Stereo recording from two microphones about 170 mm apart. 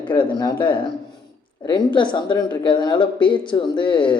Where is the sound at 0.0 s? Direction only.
30° left (ahead or behind).